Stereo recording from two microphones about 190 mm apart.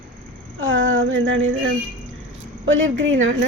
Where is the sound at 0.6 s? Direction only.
90° right.